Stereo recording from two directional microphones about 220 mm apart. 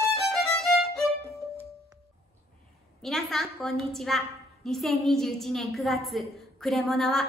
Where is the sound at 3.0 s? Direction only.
Centre (ahead or behind).